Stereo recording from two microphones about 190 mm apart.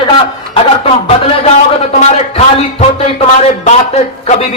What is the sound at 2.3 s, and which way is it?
Music, 35° left (ahead or behind).